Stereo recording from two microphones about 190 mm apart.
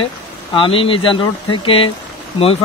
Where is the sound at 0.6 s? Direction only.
25° left (ahead or behind).